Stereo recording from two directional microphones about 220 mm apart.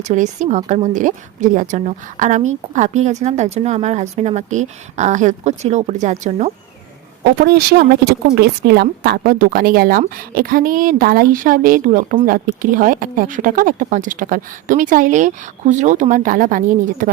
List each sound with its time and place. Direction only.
0.1 s a woman's voice: 35° right (ahead or behind)
7.4 s a woman's voice: 45° right (ahead or behind)